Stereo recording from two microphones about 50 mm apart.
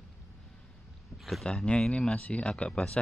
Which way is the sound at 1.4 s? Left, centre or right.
Centre.